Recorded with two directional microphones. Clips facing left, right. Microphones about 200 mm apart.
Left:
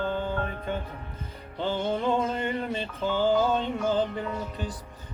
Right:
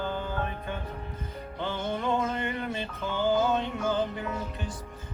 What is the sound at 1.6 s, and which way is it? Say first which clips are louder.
Music: left 4 dB; 30° left (ahead or behind).